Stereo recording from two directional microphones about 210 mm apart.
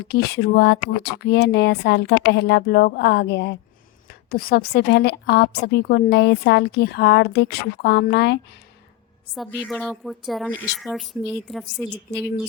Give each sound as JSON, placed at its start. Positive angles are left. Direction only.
{"t": 0.0, "sound": "a woman's voice", "side_deg": 50}
{"t": 9.6, "sound": "speech", "side_deg": 0}